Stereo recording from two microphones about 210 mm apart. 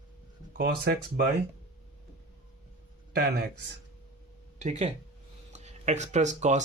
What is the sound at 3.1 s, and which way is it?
Speech, 45° right (ahead or behind).